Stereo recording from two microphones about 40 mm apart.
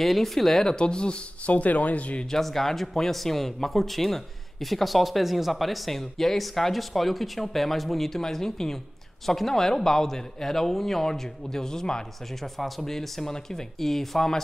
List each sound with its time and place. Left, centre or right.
0.0 s speech: centre
0.7 s speech: left
1.5 s speech: left
2.3 s speech: centre
12.5 s speech: centre